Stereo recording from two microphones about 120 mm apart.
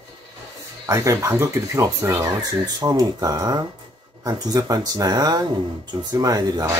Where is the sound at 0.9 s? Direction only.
25° right (ahead or behind).